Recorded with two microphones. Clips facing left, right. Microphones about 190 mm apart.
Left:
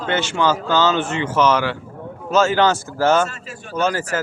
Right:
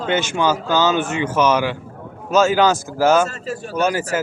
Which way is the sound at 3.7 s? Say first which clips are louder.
Right 1 dB; 15° right (ahead or behind).